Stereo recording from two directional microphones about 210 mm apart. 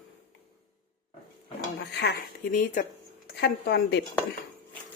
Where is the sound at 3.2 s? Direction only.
50° left (ahead or behind).